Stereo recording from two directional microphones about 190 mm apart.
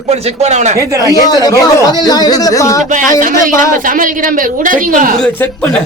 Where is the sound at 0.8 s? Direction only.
20° right (ahead or behind).